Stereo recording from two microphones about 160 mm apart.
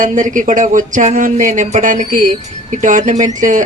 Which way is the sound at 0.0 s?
55° right (ahead or behind).